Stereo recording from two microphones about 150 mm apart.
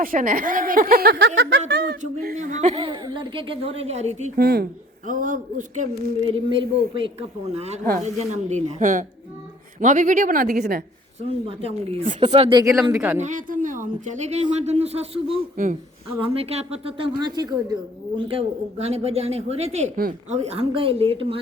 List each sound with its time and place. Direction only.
0.0 s a woman's voice: 65° right (ahead or behind); by 2.3 s 90° right
2.3 s a woman's voice: 50° right (ahead or behind)
2.7 s speech: 35° right (ahead or behind)
4.4 s speech: 90° right
5.0 s a woman's voice: 60° right (ahead or behind)
6.2 s a woman's voice: 35° right (ahead or behind); by 10.8 s 80° right
11.2 s a woman's voice: 40° right (ahead or behind)
12.5 s speech: 25° right (ahead or behind)
13.2 s a woman's voice: 60° right (ahead or behind); by 15.4 s 40° right (ahead or behind)
15.5 s a woman's voice: 60° right (ahead or behind)
16.2 s speech: 40° right (ahead or behind)
18.3 s a woman's voice: 40° right (ahead or behind)